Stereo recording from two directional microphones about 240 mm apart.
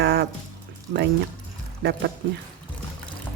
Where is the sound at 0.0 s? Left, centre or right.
Right.